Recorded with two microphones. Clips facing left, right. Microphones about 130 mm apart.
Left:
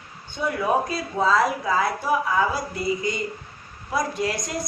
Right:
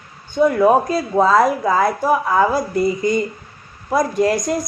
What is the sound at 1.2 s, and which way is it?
A woman's voice, 50° right (ahead or behind).